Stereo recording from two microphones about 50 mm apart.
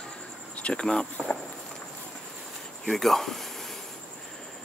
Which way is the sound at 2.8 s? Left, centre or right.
Centre.